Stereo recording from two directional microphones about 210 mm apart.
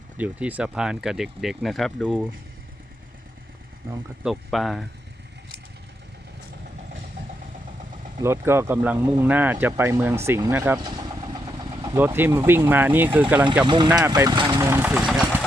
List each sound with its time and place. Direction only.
0.2 s speech: 5° right (ahead or behind)
4.2 s speech: centre (ahead or behind)
8.2 s speech: 10° right (ahead or behind)
11.9 s speech: 10° right (ahead or behind)
13.9 s vehicle: 15° right (ahead or behind)
14.6 s engine: 10° right (ahead or behind)